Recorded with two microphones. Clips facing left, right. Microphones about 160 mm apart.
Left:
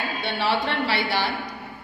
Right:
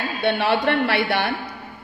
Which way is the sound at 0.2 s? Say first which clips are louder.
Right 6 dB; 55° right (ahead or behind).